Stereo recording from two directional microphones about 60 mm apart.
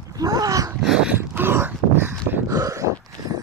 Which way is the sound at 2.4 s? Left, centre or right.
Right.